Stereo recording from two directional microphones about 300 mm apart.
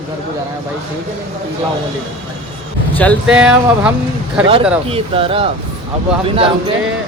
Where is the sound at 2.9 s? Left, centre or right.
Centre.